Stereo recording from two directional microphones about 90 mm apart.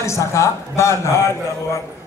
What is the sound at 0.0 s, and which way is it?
A man's voice, 30° left (ahead or behind).